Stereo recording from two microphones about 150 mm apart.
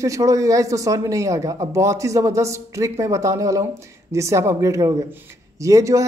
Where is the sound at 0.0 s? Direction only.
20° right (ahead or behind).